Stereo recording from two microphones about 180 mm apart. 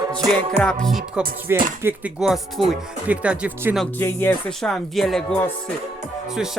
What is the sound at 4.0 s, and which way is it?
Speech, 10° left (ahead or behind).